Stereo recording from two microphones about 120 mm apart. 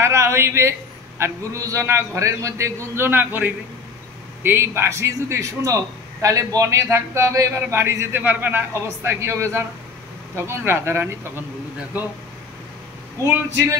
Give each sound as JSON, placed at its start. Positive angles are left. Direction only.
{"t": 0.0, "sound": "a man's voice", "side_deg": -25}
{"t": 13.2, "sound": "a man's voice", "side_deg": -25}